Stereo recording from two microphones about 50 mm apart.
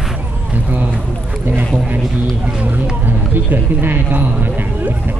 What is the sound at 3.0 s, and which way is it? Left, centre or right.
A man's voice, right.